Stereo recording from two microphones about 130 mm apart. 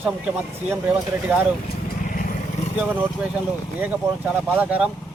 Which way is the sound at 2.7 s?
10° right (ahead or behind).